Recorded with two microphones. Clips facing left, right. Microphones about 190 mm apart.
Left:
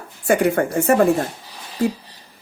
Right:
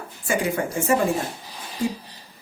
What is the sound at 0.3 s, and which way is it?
Speech, 60° left (ahead or behind).